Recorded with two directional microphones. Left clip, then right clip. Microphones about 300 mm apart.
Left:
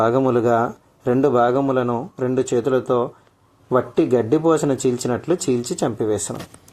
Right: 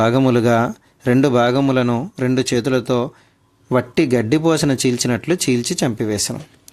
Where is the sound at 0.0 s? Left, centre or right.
Right.